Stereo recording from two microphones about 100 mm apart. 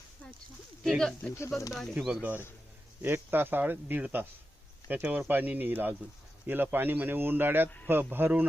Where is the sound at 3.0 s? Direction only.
20° right (ahead or behind).